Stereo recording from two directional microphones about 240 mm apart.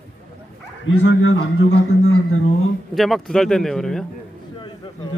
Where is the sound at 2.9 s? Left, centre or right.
Centre.